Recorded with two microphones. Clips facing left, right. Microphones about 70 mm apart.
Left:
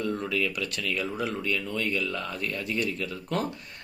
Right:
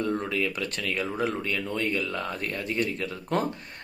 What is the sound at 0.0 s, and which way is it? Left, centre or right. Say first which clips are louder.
Speech: right 1 dB; right.